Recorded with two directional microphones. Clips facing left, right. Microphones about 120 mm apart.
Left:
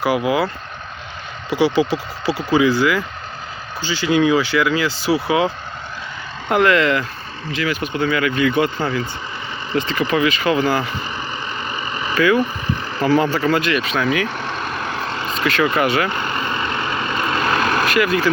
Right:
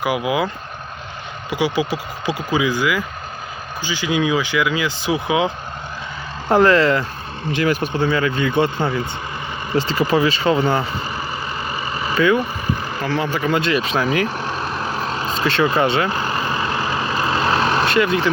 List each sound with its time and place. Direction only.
0.0 s speech: 15° right (ahead or behind)
6.5 s speech: 35° right (ahead or behind)
8.1 s speech: 25° right (ahead or behind)
11.7 s vehicle: 35° right (ahead or behind)
12.1 s speech: 20° right (ahead or behind)
12.4 s speech: 10° right (ahead or behind)
13.1 s speech: 5° left (ahead or behind)
13.3 s speech: 15° right (ahead or behind)
13.7 s speech: 30° right (ahead or behind)
14.3 s vehicle: 10° right (ahead or behind)
15.4 s speech: 30° right (ahead or behind)
16.1 s vehicle: 35° right (ahead or behind)